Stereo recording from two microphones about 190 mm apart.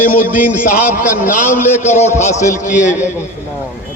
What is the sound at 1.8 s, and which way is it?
A man's voice, 35° left (ahead or behind).